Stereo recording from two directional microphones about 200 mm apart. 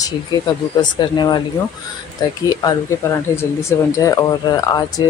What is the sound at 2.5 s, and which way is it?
Speech, 20° left (ahead or behind).